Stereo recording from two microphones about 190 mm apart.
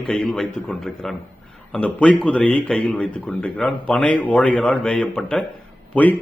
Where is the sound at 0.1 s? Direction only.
Centre (ahead or behind).